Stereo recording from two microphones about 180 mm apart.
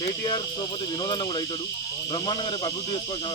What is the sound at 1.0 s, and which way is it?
Speech, 20° left (ahead or behind).